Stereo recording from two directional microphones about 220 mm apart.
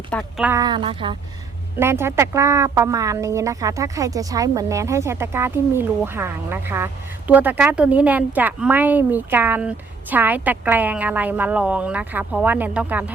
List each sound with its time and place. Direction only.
0.1 s speech: 5° left (ahead or behind)
0.4 s speech: 15° right (ahead or behind)
1.8 s a woman's voice: 10° right (ahead or behind)